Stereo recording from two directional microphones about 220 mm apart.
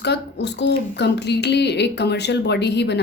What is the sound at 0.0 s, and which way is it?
Speech, 50° left (ahead or behind).